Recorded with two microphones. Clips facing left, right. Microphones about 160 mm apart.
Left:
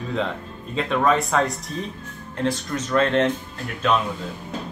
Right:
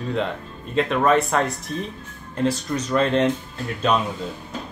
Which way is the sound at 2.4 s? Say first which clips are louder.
Right 2 dB; 10° right (ahead or behind).